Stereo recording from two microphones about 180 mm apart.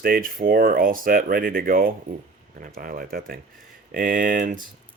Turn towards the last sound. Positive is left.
turn(degrees=-45)  # may be behind; listen again after turning